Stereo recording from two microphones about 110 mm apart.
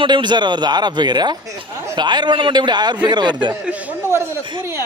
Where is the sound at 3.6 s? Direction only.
10° right (ahead or behind).